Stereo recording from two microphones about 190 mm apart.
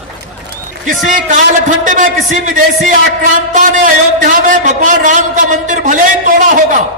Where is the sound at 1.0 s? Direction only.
40° right (ahead or behind).